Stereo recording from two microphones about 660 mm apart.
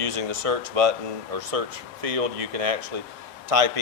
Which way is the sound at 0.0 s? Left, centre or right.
Right.